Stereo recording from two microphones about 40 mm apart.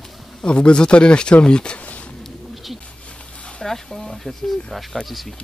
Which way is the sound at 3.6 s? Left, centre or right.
Centre.